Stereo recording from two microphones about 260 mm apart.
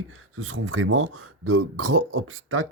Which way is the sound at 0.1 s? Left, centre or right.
Right.